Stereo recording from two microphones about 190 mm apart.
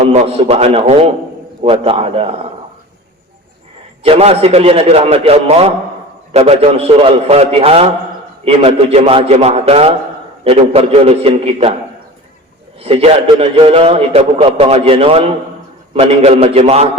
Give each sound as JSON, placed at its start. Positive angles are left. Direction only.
{"t": 0.0, "sound": "a man's voice", "side_deg": -35}
{"t": 4.0, "sound": "a man's voice", "side_deg": -30}
{"t": 12.8, "sound": "a man's voice", "side_deg": -30}